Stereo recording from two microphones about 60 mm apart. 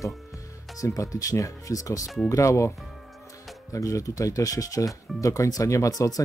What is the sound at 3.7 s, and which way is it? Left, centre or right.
Speech, left.